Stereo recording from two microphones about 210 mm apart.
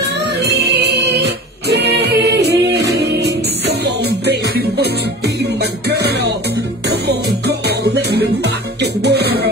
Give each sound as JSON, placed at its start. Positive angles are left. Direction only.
{"t": 0.0, "sound": "music", "side_deg": -50}